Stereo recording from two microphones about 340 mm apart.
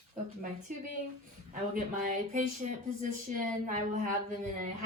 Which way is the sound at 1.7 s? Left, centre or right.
Right.